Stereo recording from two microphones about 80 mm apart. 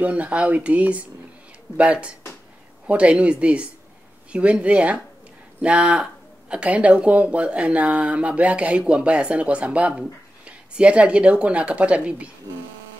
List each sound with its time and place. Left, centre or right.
0.0 s speech: centre